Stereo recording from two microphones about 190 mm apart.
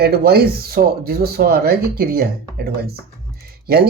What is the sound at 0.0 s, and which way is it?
Speech, 55° right (ahead or behind).